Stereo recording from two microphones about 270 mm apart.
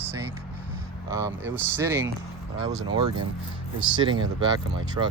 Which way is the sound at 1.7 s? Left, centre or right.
Centre.